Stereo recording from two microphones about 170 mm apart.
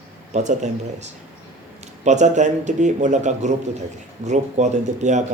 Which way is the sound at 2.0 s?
45° right (ahead or behind).